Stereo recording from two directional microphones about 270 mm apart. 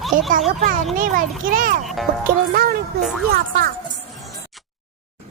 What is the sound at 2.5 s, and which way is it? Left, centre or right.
Speech, right.